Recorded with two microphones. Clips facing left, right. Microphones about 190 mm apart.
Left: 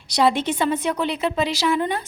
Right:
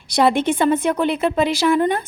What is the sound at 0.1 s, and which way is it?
Speech, 55° right (ahead or behind).